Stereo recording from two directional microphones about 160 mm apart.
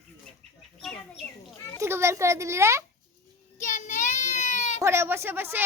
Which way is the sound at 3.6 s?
50° left (ahead or behind).